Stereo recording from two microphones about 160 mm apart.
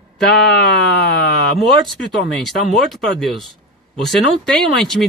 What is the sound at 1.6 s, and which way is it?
Speech, centre (ahead or behind).